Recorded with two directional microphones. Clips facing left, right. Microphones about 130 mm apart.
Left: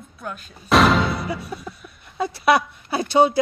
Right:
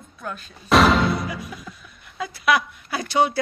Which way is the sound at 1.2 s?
30° left (ahead or behind).